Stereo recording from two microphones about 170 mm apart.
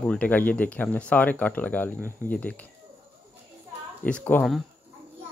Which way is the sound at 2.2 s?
10° left (ahead or behind).